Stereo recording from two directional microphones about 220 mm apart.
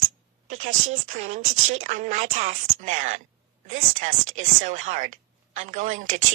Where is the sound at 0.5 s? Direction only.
35° right (ahead or behind).